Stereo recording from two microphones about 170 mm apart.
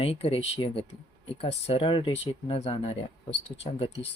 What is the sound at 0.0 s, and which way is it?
Speech, 35° left (ahead or behind).